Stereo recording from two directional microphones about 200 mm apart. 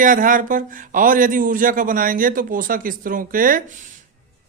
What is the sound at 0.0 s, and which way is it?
Speech, 40° right (ahead or behind).